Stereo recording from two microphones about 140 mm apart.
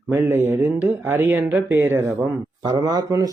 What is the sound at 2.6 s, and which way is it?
Speech, 30° right (ahead or behind).